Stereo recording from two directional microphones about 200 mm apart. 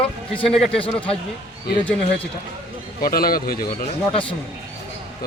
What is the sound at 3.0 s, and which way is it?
Speech, 45° left (ahead or behind).